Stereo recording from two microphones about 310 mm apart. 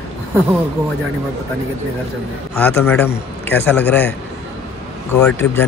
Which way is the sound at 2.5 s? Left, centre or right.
Centre.